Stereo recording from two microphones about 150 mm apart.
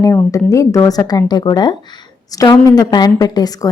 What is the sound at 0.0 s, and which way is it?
A woman's voice, 20° left (ahead or behind).